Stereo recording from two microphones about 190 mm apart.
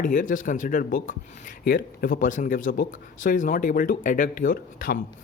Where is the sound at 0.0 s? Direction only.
45° left (ahead or behind).